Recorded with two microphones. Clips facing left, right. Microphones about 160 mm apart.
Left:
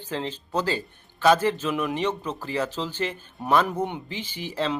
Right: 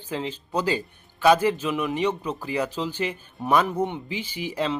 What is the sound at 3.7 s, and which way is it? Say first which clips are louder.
Speech: right 2 dB; centre (ahead or behind).